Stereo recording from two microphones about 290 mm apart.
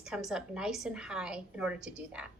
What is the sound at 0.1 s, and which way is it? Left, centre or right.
A woman's voice, centre.